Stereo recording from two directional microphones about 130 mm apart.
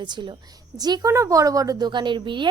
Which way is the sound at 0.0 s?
35° right (ahead or behind).